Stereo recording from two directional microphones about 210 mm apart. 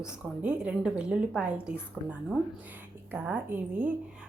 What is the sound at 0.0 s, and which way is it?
A woman's voice, 5° right (ahead or behind).